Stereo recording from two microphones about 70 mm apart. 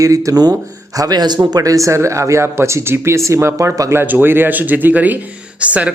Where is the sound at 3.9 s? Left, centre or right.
Right.